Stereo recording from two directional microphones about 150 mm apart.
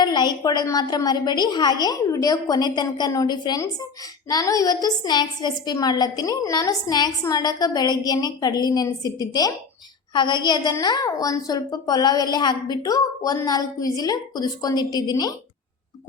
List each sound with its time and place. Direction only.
0.0 s a woman's voice: 30° left (ahead or behind)